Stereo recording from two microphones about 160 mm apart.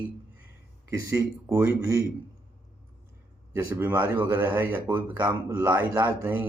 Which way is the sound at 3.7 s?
10° right (ahead or behind).